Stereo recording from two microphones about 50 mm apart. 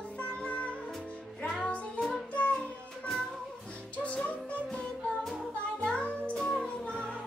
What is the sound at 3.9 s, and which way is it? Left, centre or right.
Music, left.